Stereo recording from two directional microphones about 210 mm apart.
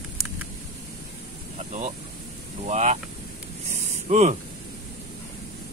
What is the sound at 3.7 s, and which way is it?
Spray, 35° right (ahead or behind).